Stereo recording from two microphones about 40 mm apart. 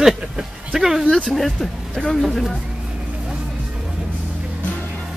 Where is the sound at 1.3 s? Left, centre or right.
Centre.